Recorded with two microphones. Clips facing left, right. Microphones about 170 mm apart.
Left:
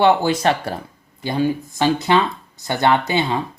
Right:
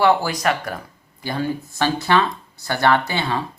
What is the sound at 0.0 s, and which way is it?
Speech, 25° left (ahead or behind).